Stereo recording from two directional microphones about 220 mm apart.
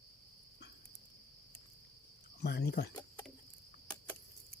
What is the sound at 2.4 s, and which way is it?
Speech, 45° left (ahead or behind).